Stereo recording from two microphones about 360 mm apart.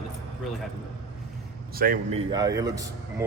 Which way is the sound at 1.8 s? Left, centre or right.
Right.